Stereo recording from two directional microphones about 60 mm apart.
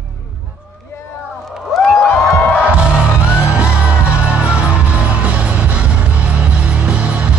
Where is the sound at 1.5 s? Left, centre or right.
Centre.